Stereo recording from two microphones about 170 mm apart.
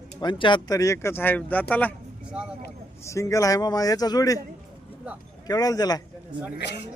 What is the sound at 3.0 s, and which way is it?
A man's voice, 20° left (ahead or behind).